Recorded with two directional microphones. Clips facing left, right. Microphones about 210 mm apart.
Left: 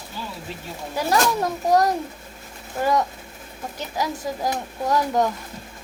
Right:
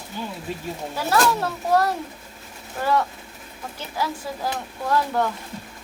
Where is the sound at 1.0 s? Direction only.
15° left (ahead or behind).